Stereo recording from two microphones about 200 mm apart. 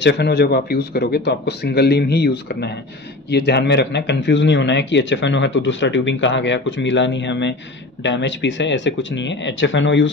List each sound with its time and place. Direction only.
0.0 s speech: 55° left (ahead or behind)